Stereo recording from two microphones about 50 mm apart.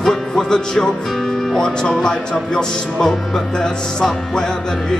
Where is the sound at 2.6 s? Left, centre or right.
Centre.